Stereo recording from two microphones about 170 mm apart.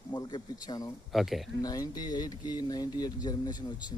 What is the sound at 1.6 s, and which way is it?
Speech, 20° left (ahead or behind).